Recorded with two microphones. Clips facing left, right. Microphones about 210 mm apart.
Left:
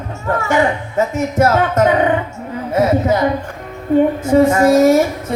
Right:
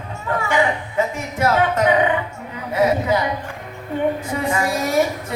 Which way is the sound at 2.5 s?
45° left (ahead or behind).